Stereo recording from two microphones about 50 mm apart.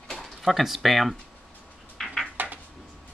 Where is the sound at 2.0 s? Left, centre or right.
Centre.